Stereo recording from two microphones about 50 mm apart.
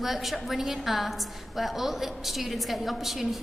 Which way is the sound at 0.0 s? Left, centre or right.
Centre.